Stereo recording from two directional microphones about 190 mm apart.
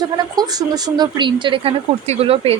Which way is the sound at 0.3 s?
20° right (ahead or behind).